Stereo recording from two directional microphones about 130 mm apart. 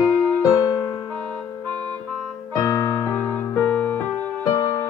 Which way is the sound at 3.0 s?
15° left (ahead or behind).